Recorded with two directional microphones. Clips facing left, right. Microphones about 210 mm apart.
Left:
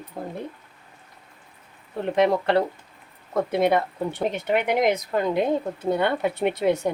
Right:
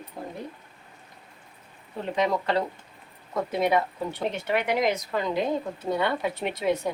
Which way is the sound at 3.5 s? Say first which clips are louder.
Left 2 dB; 60° left (ahead or behind).